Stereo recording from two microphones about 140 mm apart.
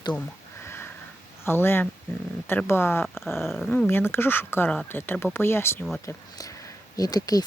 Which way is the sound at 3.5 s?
Centre (ahead or behind).